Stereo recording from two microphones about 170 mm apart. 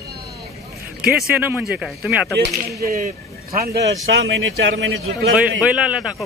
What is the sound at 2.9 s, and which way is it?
Speech, 55° right (ahead or behind).